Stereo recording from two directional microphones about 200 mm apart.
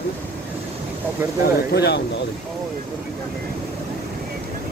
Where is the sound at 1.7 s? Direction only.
55° left (ahead or behind).